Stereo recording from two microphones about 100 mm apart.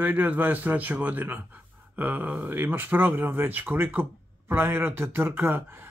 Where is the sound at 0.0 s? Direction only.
15° right (ahead or behind).